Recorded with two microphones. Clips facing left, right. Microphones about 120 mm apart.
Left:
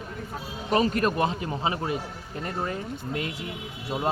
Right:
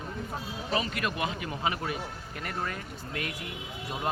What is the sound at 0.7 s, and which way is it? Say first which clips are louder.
Speech: left 8 dB; 40° left (ahead or behind).